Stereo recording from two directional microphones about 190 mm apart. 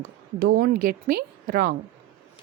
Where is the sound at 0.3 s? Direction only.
50° right (ahead or behind).